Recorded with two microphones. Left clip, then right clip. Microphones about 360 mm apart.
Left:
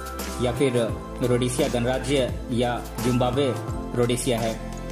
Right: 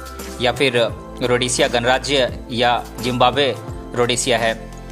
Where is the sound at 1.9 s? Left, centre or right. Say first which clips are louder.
Right 7 dB; centre.